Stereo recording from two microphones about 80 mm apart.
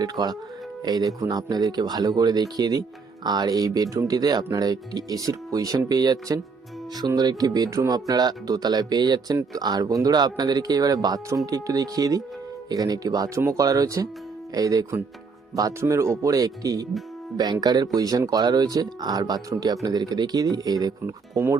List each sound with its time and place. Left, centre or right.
0.0 s speech: right
21.3 s speech: right